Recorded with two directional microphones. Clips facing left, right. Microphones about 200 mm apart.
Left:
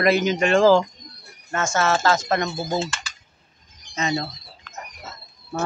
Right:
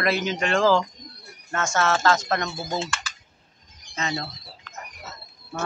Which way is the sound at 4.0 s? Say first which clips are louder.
Left 5 dB; 20° left (ahead or behind).